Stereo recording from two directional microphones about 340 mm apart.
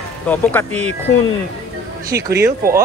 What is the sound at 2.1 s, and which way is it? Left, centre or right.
Speech, right.